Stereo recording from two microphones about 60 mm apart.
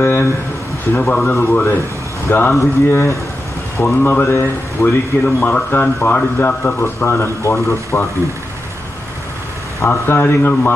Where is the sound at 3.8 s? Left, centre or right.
Left.